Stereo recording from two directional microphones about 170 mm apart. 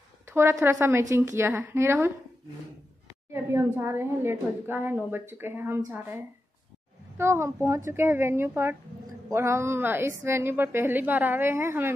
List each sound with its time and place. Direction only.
0.3 s a woman's voice: 15° right (ahead or behind)
3.3 s a woman's voice: 15° right (ahead or behind)
7.2 s a woman's voice: 15° right (ahead or behind)